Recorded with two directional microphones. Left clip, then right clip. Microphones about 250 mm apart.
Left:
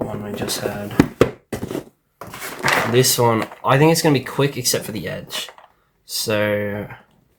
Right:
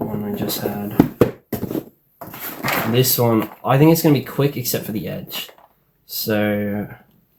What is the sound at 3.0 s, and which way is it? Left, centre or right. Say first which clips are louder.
Speech: left 1 dB; left.